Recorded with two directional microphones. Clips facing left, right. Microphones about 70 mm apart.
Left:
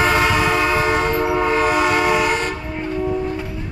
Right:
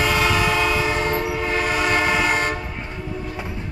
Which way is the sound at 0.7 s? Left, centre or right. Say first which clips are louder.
Left 4 dB; left.